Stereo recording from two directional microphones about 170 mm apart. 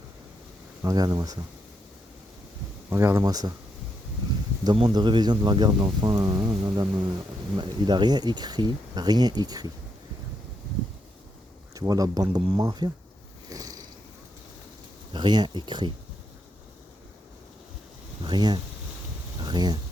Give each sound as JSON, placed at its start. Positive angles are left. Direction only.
{"t": 0.8, "sound": "speech", "side_deg": -20}
{"t": 2.9, "sound": "speech", "side_deg": -15}
{"t": 4.6, "sound": "speech", "side_deg": -25}
{"t": 11.7, "sound": "speech", "side_deg": -20}
{"t": 13.5, "sound": "a sound", "side_deg": -20}
{"t": 15.1, "sound": "speech", "side_deg": -25}
{"t": 18.2, "sound": "speech", "side_deg": -25}